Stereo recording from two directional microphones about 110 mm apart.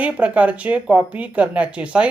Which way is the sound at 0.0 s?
10° right (ahead or behind).